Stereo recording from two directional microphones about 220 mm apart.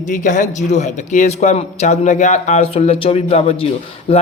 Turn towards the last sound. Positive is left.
turn(degrees=25)  # may be behind; listen again after turning